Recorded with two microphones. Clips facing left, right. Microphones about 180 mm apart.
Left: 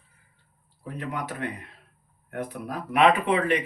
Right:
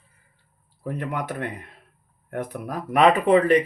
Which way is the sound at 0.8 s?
50° right (ahead or behind).